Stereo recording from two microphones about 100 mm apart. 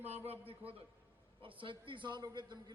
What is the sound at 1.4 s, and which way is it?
A man's voice, 60° right (ahead or behind).